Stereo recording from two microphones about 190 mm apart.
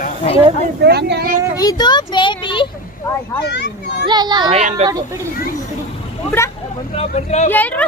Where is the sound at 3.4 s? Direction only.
60° left (ahead or behind).